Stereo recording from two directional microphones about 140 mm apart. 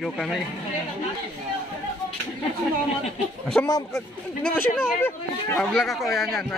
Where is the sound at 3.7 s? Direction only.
25° left (ahead or behind).